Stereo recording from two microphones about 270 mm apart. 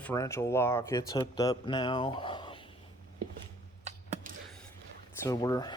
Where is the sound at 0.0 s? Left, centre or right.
Centre.